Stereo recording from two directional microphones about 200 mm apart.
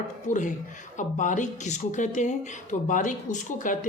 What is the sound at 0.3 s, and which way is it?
Speech, 40° left (ahead or behind).